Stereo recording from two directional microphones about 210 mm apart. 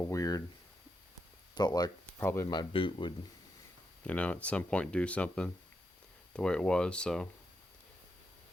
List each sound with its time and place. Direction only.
0.1 s speech: 15° left (ahead or behind)
1.5 s speech: 20° left (ahead or behind)
4.0 s speech: 5° left (ahead or behind)